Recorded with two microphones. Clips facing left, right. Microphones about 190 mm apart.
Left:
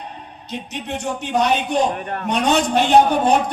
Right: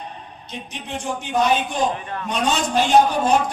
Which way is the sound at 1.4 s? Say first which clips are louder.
Left 2 dB; 60° left (ahead or behind).